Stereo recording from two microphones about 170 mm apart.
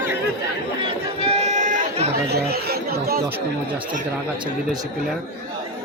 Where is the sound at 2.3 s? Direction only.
70° right (ahead or behind).